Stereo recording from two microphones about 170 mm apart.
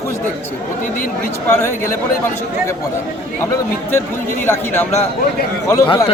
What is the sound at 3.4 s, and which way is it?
A man's voice, 15° left (ahead or behind).